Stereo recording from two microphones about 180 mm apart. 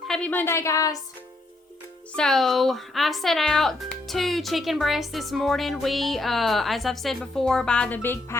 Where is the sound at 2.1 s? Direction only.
5° left (ahead or behind).